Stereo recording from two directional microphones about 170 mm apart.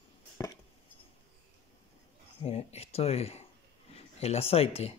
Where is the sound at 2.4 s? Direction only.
35° left (ahead or behind).